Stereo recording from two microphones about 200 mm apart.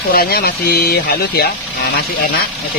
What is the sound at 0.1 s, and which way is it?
Speech, 50° left (ahead or behind).